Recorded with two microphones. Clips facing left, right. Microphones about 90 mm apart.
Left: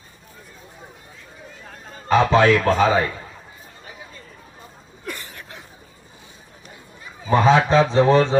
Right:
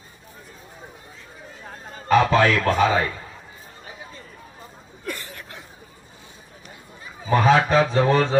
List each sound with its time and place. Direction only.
2.0 s a man's voice: 25° left (ahead or behind)
7.3 s a man's voice: 25° left (ahead or behind)